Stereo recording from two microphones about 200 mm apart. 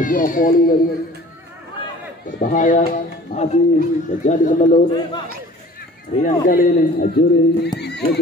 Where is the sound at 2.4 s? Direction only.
40° left (ahead or behind).